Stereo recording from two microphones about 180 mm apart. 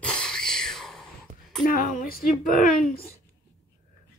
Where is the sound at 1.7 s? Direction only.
55° left (ahead or behind).